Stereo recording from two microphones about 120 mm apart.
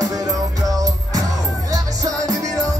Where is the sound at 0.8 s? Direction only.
30° right (ahead or behind).